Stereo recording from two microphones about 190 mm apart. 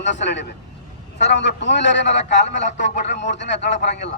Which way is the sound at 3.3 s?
70° left (ahead or behind).